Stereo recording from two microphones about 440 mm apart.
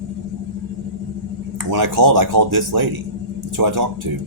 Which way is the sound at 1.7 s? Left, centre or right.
Right.